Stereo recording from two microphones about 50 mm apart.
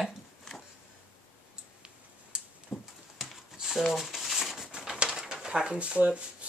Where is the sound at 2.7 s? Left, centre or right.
Centre.